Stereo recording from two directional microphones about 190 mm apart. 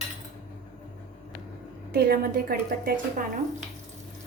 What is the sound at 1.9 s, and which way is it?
A woman's voice, 55° right (ahead or behind).